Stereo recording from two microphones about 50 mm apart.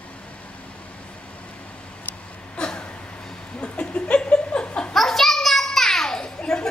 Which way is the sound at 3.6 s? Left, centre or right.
Left.